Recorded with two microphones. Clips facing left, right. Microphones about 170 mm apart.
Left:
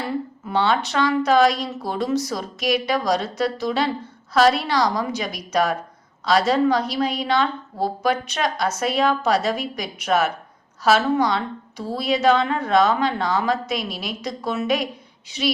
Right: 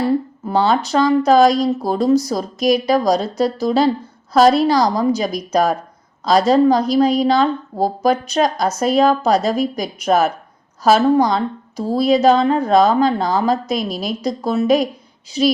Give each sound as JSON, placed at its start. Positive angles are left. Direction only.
{"t": 0.4, "sound": "a woman's voice", "side_deg": -40}